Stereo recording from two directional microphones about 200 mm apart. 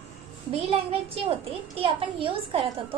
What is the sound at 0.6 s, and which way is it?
A child's voice, 30° right (ahead or behind).